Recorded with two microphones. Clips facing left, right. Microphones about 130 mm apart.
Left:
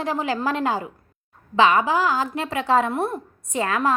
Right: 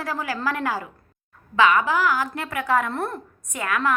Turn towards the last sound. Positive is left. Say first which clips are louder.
# left 3 dB
turn(degrees=30)  # may be behind; listen again after turning